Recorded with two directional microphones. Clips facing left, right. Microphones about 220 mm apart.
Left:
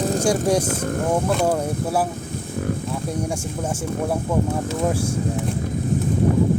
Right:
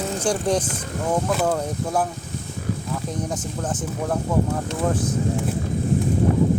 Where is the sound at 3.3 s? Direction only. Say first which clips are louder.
Left 1 dB; 10° left (ahead or behind).